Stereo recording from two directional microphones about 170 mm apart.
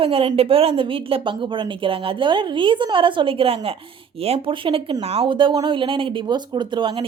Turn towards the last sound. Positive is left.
turn(degrees=-30)  # may be behind; listen again after turning